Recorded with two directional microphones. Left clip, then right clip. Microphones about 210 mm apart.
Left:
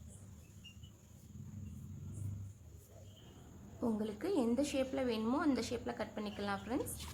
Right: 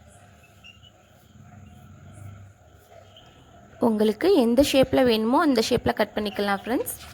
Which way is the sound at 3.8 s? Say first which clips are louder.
Right 18 dB; 40° right (ahead or behind).